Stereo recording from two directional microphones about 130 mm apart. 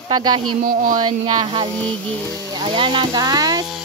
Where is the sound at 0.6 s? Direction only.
90° right.